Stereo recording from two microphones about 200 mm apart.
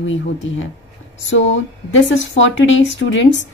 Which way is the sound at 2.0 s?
70° left (ahead or behind).